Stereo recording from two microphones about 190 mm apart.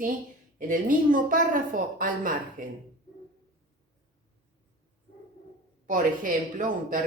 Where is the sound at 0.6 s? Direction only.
45° right (ahead or behind).